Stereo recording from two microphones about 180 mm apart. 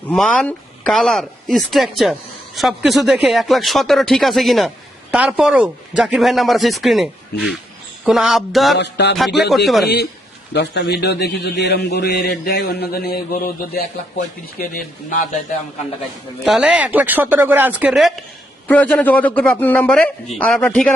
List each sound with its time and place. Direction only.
0.1 s speech: 5° left (ahead or behind)
8.8 s music: 70° left (ahead or behind)
10.5 s a man's voice: 65° left (ahead or behind); by 15.4 s 50° left (ahead or behind)
16.4 s speech: 5° right (ahead or behind)
18.7 s a man's voice: 10° left (ahead or behind)